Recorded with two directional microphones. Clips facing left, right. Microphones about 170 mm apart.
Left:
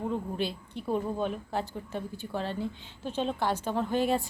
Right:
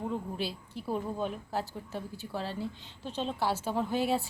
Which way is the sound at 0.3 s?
5° right (ahead or behind).